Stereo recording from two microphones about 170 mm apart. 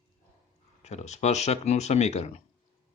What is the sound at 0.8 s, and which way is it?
Speech, 40° left (ahead or behind).